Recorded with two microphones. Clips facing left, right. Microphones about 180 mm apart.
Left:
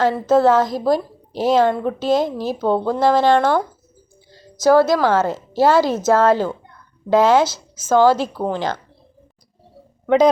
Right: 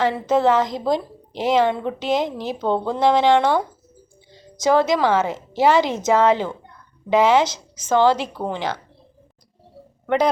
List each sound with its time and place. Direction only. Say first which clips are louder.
0.0 s a woman's voice: left 3 dB; 15° right (ahead or behind)
2.6 s speech: left 3 dB; 5° left (ahead or behind)
3.0 s a woman's voice: even; 15° right (ahead or behind)
4.6 s a woman's voice: left 4 dB; 15° right (ahead or behind)
8.4 s speech: left 4 dB; 10° left (ahead or behind)